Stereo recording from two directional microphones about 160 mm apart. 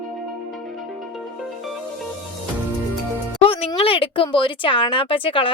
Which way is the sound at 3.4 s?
35° left (ahead or behind).